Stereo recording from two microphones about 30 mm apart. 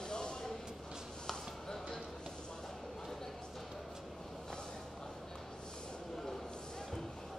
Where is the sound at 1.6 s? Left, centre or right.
Centre.